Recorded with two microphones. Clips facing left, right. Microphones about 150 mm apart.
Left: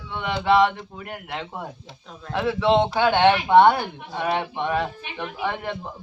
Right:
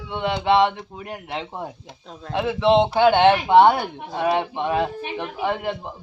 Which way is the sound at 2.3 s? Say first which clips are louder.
Right 1 dB; 20° right (ahead or behind).